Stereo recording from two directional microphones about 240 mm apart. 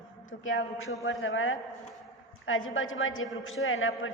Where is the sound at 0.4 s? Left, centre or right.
Left.